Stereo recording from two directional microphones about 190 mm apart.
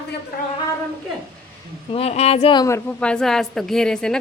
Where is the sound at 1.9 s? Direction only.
35° left (ahead or behind).